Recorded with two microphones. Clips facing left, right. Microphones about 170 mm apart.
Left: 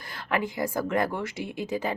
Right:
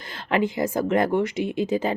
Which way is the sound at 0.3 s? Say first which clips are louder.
Right 5 dB; 25° right (ahead or behind).